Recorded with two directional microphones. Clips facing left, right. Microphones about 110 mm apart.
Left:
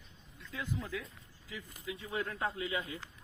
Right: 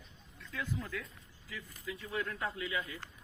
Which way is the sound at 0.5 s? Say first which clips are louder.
Even; 15° left (ahead or behind).